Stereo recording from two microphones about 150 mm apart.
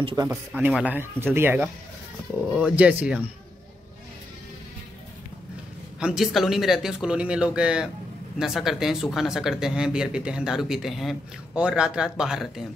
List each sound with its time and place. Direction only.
0.0 s speech: 25° right (ahead or behind)
0.6 s speech: 10° right (ahead or behind)
5.9 s speech: 5° right (ahead or behind)